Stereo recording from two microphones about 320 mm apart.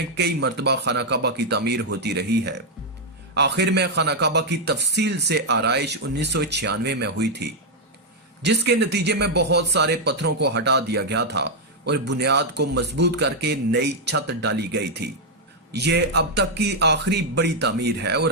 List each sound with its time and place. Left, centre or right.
0.2 s speech: right